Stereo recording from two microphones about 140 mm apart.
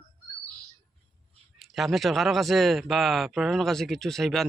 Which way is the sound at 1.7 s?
Centre (ahead or behind).